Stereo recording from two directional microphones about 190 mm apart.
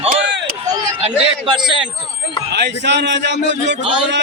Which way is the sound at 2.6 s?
65° right (ahead or behind).